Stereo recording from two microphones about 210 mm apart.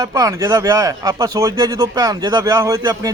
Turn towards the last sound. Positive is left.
turn(degrees=-15)  # may be behind; listen again after turning